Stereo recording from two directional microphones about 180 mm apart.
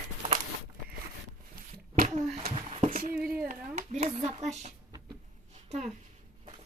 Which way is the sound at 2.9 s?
50° right (ahead or behind).